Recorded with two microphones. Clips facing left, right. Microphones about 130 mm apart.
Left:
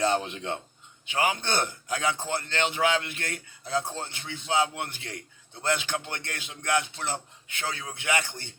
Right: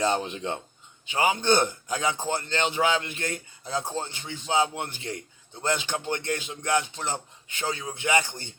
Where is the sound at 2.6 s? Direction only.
30° right (ahead or behind).